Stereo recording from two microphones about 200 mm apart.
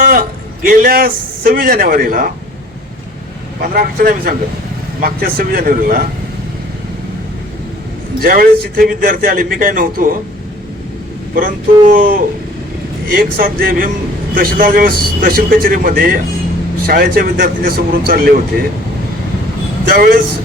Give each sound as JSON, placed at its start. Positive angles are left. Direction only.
{"t": 0.0, "sound": "a man's voice", "side_deg": -45}
{"t": 3.6, "sound": "a man's voice", "side_deg": -50}
{"t": 8.2, "sound": "a man's voice", "side_deg": -45}
{"t": 11.3, "sound": "a man's voice", "side_deg": -45}
{"t": 19.9, "sound": "a man's voice", "side_deg": -50}